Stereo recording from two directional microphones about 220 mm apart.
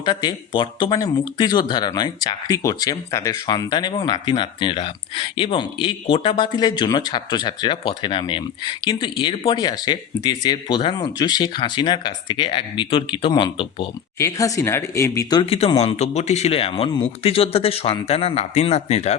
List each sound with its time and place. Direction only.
0.0 s speech: 20° left (ahead or behind)